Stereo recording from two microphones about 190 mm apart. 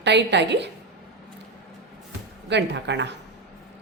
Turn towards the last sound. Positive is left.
turn(degrees=-65)  # may be behind; listen again after turning